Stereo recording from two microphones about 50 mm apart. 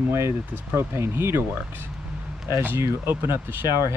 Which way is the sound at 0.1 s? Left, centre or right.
Right.